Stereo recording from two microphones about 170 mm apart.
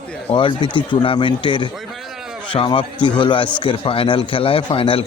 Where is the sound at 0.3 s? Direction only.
30° left (ahead or behind).